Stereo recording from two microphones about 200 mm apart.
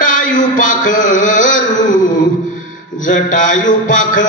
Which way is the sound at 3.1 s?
40° left (ahead or behind).